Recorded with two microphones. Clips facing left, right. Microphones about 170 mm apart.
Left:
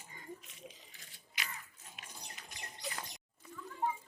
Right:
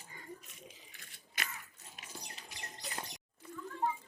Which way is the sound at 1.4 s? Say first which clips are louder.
Right 2 dB; 50° right (ahead or behind).